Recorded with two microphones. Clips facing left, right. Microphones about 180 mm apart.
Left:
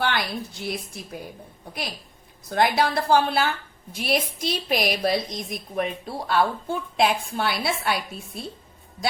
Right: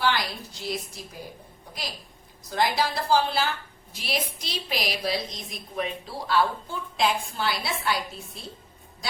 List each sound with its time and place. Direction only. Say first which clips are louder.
0.0 s a woman's voice: even; 60° left (ahead or behind)
2.5 s a woman's voice: left 4 dB; 60° left (ahead or behind)